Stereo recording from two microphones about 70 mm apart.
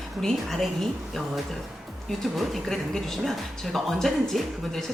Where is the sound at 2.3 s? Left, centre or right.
Centre.